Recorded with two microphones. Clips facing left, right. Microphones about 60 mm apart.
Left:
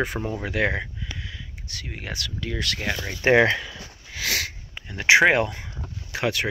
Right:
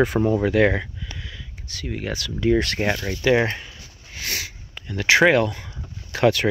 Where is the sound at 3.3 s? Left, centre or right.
Left.